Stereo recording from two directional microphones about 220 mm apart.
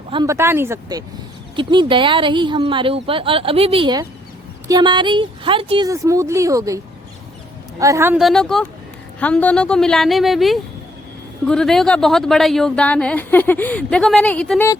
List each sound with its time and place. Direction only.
0.1 s speech: 15° right (ahead or behind)
7.8 s speech: 15° right (ahead or behind); by 14.7 s 5° left (ahead or behind)